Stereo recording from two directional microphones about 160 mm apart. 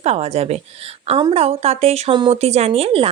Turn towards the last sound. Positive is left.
turn(degrees=-40)  # may be behind; listen again after turning